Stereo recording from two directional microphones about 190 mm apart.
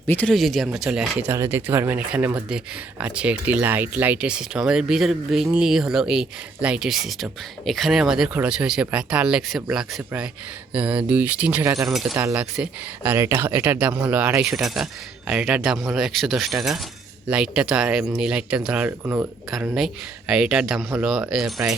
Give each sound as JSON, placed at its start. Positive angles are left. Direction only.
{"t": 0.1, "sound": "speech", "side_deg": 5}
{"t": 1.3, "sound": "speech", "side_deg": -15}
{"t": 11.9, "sound": "speech", "side_deg": 0}
{"t": 12.1, "sound": "speech", "side_deg": -15}